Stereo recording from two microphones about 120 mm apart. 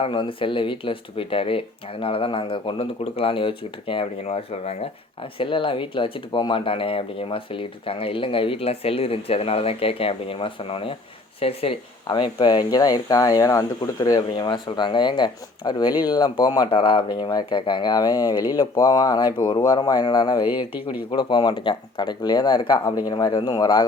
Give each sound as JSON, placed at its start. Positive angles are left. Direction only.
{"t": 0.0, "sound": "speech", "side_deg": 45}
{"t": 4.2, "sound": "speech", "side_deg": 65}
{"t": 12.0, "sound": "speech", "side_deg": 40}